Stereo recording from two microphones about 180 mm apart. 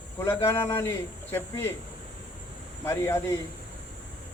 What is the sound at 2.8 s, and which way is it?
Speech, 15° left (ahead or behind).